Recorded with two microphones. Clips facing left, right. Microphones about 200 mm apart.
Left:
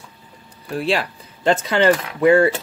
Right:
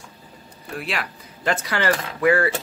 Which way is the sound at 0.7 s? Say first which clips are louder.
Left 8 dB; 30° left (ahead or behind).